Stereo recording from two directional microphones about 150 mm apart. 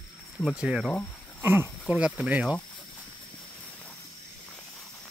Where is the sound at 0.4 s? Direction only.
5° right (ahead or behind).